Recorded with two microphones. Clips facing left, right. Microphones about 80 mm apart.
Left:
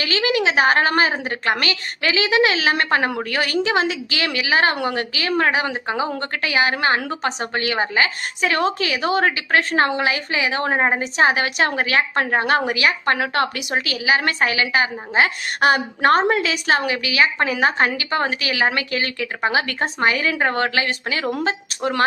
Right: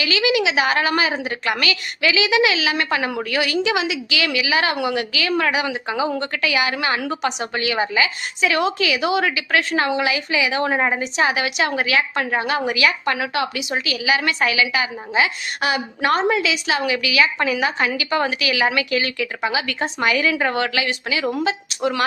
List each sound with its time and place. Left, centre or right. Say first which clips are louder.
0.0 s a woman's voice: right 1 dB; left
13.1 s a woman's voice: left 2 dB; left